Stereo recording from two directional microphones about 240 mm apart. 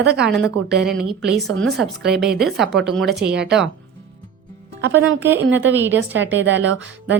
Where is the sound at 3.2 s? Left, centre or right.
Right.